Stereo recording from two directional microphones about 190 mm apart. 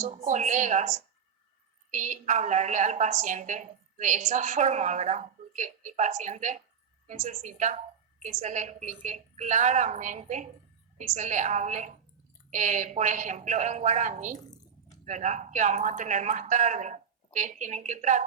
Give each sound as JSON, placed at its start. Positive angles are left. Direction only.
{"t": 0.0, "sound": "a woman's voice", "side_deg": -40}